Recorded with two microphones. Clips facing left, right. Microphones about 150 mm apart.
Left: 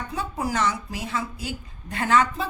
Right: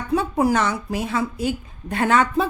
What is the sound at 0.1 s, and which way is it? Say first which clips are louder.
Speech: right 11 dB; 60° right (ahead or behind).